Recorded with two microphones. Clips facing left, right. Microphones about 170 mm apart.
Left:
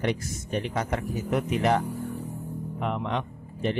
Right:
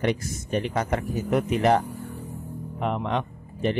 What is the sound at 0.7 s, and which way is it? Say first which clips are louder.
Speech: right 3 dB; 50° right (ahead or behind).